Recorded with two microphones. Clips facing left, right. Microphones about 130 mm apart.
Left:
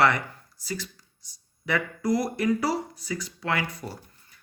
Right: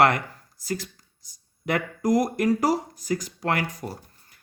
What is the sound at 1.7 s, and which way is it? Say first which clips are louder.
Speech: right 2 dB; 45° right (ahead or behind).